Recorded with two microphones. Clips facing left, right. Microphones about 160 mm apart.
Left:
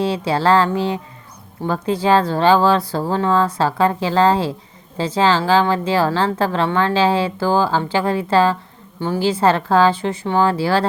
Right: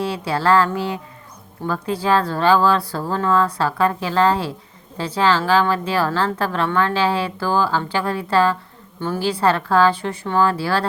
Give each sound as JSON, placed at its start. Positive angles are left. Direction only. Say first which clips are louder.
{"t": 0.0, "sound": "speech", "louder": "left 3 dB", "side_deg": 30}